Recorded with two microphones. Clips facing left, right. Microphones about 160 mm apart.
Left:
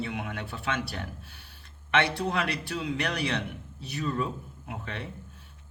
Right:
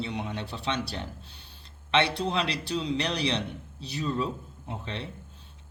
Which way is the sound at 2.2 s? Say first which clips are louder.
Right 1 dB; 25° right (ahead or behind).